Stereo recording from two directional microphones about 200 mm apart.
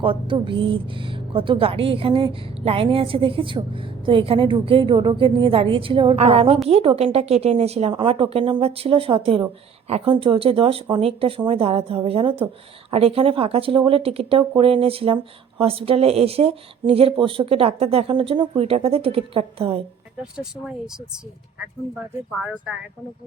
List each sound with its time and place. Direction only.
0.0 s speech: 25° right (ahead or behind)